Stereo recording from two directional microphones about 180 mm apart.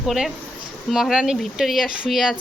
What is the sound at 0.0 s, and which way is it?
Speech, centre (ahead or behind).